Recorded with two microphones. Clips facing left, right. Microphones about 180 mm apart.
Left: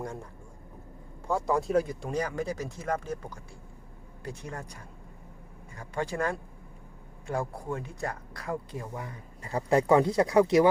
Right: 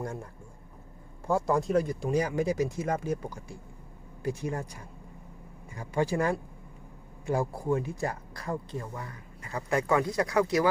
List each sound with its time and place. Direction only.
1.3 s speech: centre (ahead or behind)
5.7 s speech: 10° right (ahead or behind)
8.7 s speech: 15° left (ahead or behind)
9.4 s speech: 30° left (ahead or behind)